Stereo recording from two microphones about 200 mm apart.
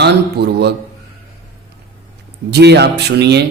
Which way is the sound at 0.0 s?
55° right (ahead or behind).